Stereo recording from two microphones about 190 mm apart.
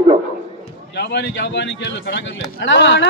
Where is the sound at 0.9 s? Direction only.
65° left (ahead or behind).